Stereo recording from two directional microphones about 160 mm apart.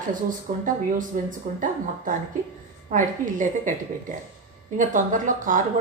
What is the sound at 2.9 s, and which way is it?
Speech, 55° right (ahead or behind).